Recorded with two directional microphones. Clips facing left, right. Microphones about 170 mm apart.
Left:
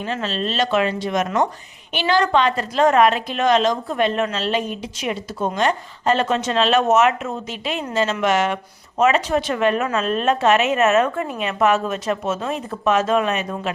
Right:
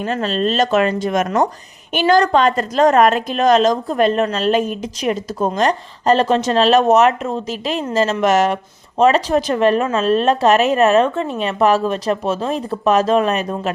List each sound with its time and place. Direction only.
0.0 s a woman's voice: 45° right (ahead or behind)